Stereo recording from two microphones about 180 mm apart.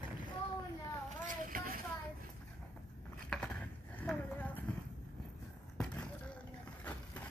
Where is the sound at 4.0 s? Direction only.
10° left (ahead or behind).